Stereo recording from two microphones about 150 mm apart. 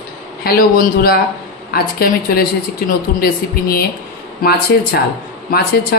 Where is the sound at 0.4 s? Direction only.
90° left.